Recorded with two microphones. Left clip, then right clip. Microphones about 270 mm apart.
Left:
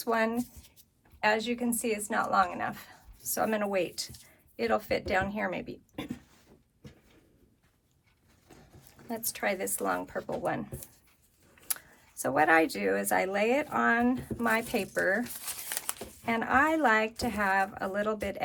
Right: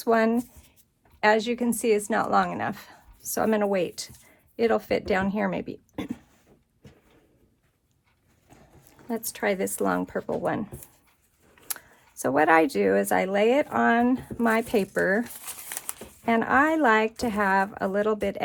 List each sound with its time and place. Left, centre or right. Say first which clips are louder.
0.0 s speech: right 6 dB; right
8.9 s speech: right 5 dB; right
11.7 s a sound: right 2 dB; right
12.2 s speech: right 4 dB; right
15.5 s crumpling: left 2 dB; centre
16.2 s speech: right 5 dB; right